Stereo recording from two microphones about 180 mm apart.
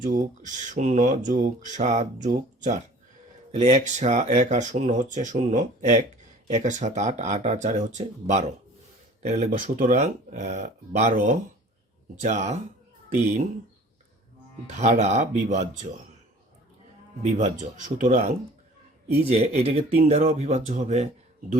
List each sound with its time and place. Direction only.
0.0 s speech: 45° right (ahead or behind)
14.7 s speech: 40° right (ahead or behind)
17.2 s speech: 40° right (ahead or behind)